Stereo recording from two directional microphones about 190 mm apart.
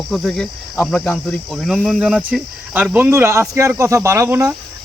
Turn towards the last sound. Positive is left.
turn(degrees=-15)  # may be behind; listen again after turning